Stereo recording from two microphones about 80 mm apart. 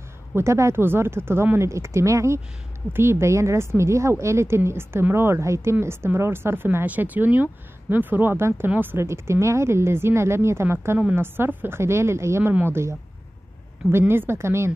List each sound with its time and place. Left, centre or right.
0.4 s a woman's voice: right